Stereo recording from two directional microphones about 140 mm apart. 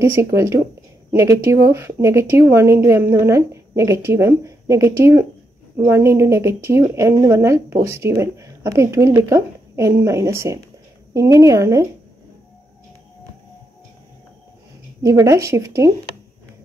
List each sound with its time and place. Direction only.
0.0 s speech: 20° right (ahead or behind)
15.0 s speech: 20° right (ahead or behind)